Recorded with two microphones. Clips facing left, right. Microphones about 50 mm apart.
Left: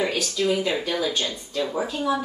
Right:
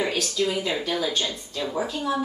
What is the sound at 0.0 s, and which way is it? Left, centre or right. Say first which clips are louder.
A woman's voice: left 1 dB; centre.